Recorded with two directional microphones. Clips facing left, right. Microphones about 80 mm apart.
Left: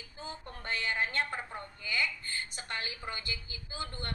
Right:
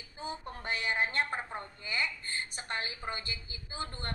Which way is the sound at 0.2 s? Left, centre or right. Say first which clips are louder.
Right 4 dB; centre.